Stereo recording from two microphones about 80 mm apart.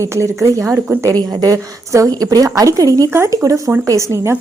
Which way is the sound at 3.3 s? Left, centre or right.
Right.